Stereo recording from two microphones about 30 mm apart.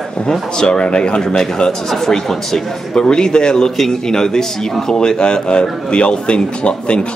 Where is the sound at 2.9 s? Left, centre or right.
Left.